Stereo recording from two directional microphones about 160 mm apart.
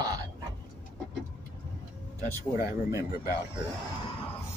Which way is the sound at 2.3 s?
20° right (ahead or behind).